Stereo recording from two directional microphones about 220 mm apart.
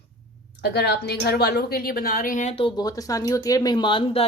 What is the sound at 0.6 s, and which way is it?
Speech, 50° left (ahead or behind).